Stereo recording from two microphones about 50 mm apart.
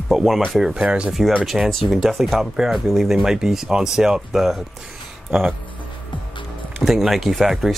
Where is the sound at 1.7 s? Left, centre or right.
Centre.